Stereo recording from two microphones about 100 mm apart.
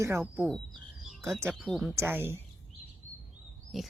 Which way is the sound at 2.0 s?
25° right (ahead or behind).